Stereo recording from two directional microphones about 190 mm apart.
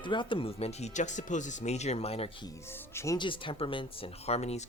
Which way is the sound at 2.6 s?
10° left (ahead or behind).